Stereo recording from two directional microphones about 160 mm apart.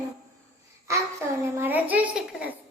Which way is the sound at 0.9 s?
20° right (ahead or behind).